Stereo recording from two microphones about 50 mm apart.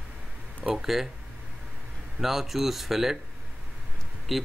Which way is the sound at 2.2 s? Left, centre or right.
Centre.